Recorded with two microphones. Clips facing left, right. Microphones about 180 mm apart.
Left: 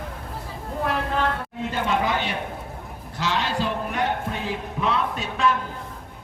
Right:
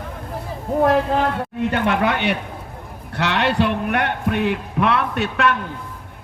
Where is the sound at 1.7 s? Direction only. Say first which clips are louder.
Right 3 dB; 65° right (ahead or behind).